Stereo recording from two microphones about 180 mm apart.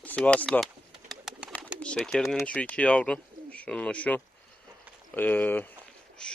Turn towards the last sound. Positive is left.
turn(degrees=5)  # may be behind; listen again after turning